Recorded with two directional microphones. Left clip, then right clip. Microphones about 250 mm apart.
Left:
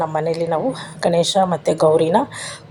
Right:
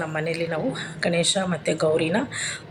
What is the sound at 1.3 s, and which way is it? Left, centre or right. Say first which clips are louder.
Speech: left 9 dB; left.